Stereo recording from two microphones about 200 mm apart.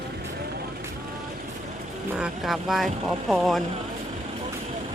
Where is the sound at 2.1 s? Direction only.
Centre (ahead or behind).